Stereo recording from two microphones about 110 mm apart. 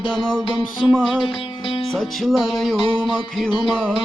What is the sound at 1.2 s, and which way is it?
Music, 55° left (ahead or behind).